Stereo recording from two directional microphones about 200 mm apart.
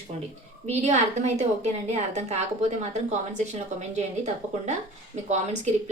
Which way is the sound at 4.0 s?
35° right (ahead or behind).